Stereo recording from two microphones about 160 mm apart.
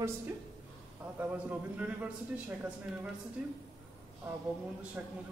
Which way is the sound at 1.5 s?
10° right (ahead or behind).